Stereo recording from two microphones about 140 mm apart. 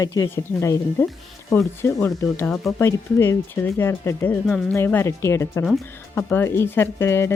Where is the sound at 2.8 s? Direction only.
20° left (ahead or behind).